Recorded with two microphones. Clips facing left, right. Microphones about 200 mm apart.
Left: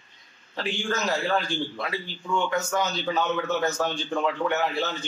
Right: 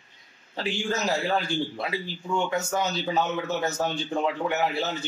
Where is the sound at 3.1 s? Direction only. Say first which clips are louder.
Left 2 dB; 20° right (ahead or behind).